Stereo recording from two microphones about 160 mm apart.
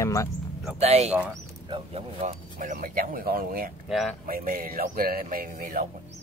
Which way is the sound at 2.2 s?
55° right (ahead or behind).